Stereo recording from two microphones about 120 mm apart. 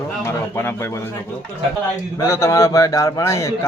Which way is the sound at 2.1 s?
25° left (ahead or behind).